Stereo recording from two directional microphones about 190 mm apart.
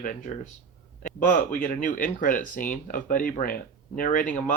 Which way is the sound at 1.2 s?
45° left (ahead or behind).